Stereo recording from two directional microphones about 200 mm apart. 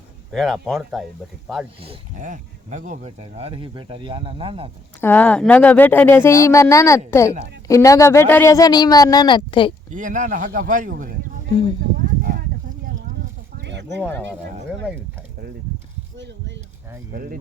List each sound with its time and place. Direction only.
0.3 s speech: centre (ahead or behind)
1.8 s speech: 35° right (ahead or behind)
4.9 s a woman's voice: 10° left (ahead or behind); by 9.7 s 25° left (ahead or behind)
9.9 s speech: 40° right (ahead or behind)
11.9 s a sound: 45° right (ahead or behind)
13.6 s a sound: 60° right (ahead or behind)
14.0 s a woman's voice: 10° left (ahead or behind)
17.1 s speech: 45° right (ahead or behind)